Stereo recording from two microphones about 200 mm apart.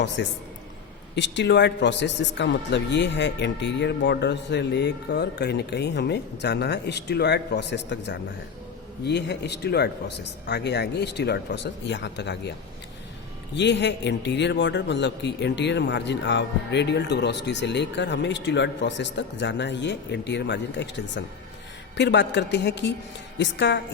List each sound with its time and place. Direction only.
0.2 s a man's voice: 60° left (ahead or behind)
13.6 s a man's voice: 60° left (ahead or behind)